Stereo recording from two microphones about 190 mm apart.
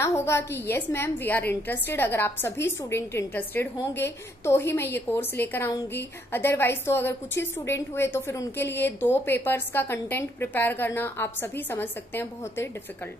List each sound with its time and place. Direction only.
0.0 s a woman's voice: 15° left (ahead or behind)